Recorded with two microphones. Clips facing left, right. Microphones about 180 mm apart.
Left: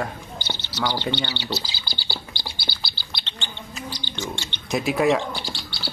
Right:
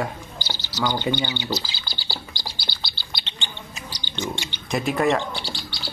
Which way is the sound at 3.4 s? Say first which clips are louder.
Left 5 dB; 15° right (ahead or behind).